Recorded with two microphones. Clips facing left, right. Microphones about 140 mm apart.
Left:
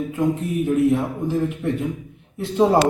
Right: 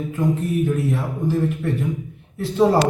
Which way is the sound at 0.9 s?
15° left (ahead or behind).